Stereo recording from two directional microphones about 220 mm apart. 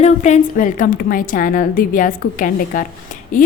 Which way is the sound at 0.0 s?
30° left (ahead or behind).